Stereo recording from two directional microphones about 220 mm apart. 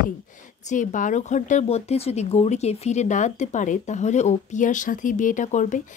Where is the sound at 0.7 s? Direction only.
35° left (ahead or behind).